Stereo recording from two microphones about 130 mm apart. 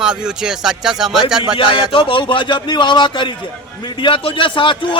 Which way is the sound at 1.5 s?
40° left (ahead or behind).